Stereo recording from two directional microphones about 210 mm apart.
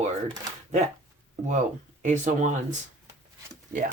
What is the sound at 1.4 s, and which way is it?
Speech, 35° right (ahead or behind).